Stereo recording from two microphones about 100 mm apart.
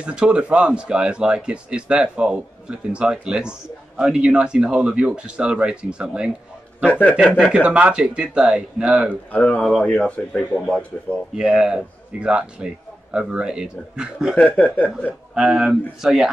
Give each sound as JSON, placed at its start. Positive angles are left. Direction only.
{"t": 0.0, "sound": "speech", "side_deg": -10}
{"t": 6.8, "sound": "speech", "side_deg": 15}
{"t": 7.3, "sound": "speech", "side_deg": -5}
{"t": 9.3, "sound": "speech", "side_deg": 15}
{"t": 11.3, "sound": "speech", "side_deg": -5}
{"t": 14.3, "sound": "speech", "side_deg": 15}
{"t": 15.3, "sound": "speech", "side_deg": -5}